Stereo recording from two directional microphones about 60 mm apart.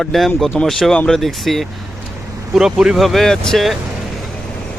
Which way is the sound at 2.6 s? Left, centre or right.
Centre.